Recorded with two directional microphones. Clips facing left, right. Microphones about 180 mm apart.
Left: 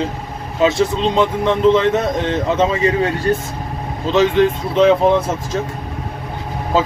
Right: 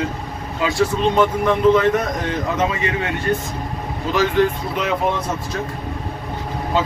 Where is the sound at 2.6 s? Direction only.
30° left (ahead or behind).